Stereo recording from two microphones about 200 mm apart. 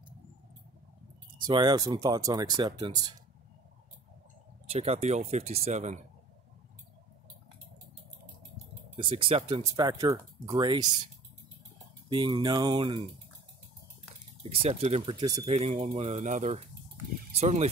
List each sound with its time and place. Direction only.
1.4 s speech: 25° right (ahead or behind)
4.6 s speech: 30° right (ahead or behind)
8.9 s speech: 25° right (ahead or behind)
12.1 s speech: 20° right (ahead or behind)
14.4 s speech: 30° right (ahead or behind)
15.5 s speech: 35° right (ahead or behind)